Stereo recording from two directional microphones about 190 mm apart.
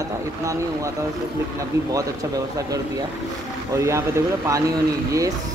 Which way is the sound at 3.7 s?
15° right (ahead or behind).